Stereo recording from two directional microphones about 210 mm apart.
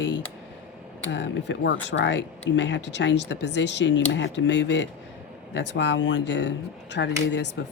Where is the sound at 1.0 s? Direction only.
55° left (ahead or behind).